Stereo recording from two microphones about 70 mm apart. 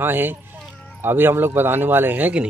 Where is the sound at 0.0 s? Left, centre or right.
Right.